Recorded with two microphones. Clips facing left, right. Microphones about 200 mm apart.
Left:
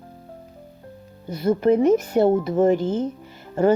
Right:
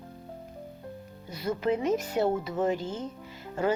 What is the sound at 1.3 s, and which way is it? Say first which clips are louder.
Speech: left 10 dB; 50° left (ahead or behind).